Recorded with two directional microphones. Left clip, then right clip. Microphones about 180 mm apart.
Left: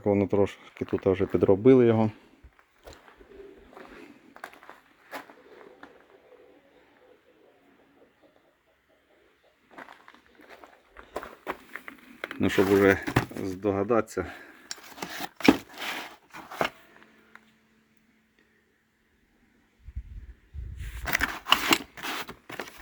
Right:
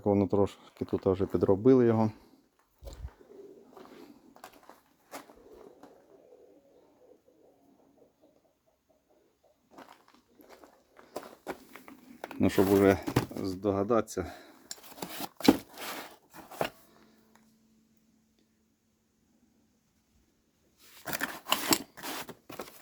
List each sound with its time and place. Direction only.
0.0 s speech: 5° right (ahead or behind)
1.5 s speech: 10° left (ahead or behind)
11.1 s walk: 10° left (ahead or behind)
12.4 s speech: 10° right (ahead or behind)
13.3 s speech: centre (ahead or behind)
14.7 s a sound: 15° right (ahead or behind)
21.1 s a sound: 15° right (ahead or behind)